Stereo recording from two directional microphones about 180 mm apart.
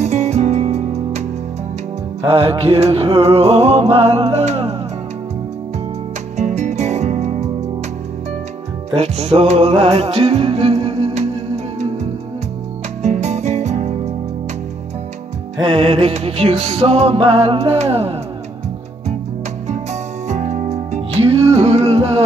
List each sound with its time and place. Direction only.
0.0 s music: 40° right (ahead or behind)
2.2 s music: 30° right (ahead or behind)
6.3 s music: 40° right (ahead or behind)
8.9 s music: 35° right (ahead or behind)
15.6 s music: 30° right (ahead or behind)
19.7 s music: 40° right (ahead or behind)